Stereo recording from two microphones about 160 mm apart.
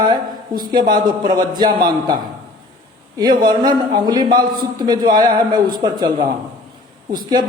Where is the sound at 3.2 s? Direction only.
25° right (ahead or behind).